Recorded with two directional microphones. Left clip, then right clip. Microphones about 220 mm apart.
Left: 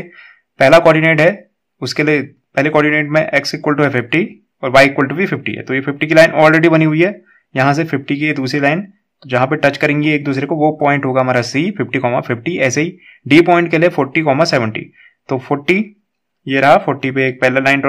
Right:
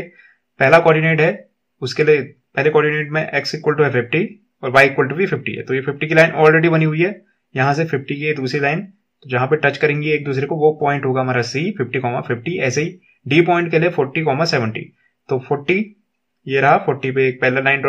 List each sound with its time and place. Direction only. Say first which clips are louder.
0.1 s a man's voice: left 8 dB; 40° left (ahead or behind)